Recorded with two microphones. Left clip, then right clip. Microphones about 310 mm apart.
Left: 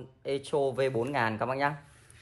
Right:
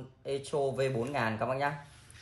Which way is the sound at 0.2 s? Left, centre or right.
Centre.